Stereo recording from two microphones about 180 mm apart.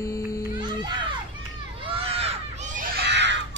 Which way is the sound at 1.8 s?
30° right (ahead or behind).